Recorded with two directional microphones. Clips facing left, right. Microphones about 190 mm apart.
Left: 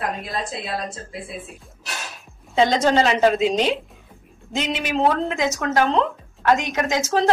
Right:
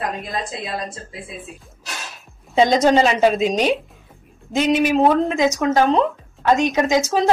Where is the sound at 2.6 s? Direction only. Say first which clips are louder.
Right 3 dB; 15° right (ahead or behind).